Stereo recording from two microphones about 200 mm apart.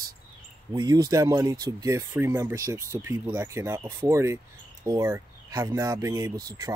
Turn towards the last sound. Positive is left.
turn(degrees=-20)  # may be behind; listen again after turning